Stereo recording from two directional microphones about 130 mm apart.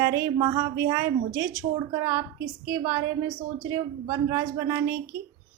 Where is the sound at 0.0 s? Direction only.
25° right (ahead or behind).